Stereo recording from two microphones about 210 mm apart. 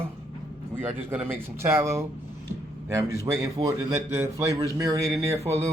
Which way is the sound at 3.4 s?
15° right (ahead or behind).